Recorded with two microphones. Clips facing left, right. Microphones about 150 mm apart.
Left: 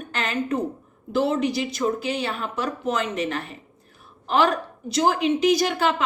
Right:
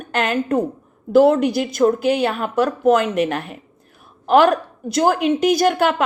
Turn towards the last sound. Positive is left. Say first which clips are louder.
# right 4 dB
turn(degrees=-55)  # may be behind; listen again after turning